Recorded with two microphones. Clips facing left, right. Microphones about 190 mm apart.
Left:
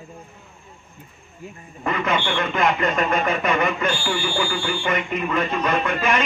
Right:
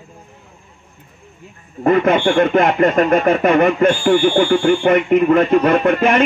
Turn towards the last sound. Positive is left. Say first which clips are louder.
# right 8 dB
turn(degrees=-55)  # may be behind; listen again after turning